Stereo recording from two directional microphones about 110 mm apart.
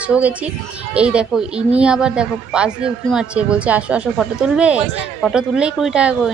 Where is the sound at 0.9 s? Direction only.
10° right (ahead or behind).